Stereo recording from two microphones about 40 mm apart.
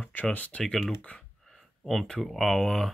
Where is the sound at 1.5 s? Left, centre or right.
Centre.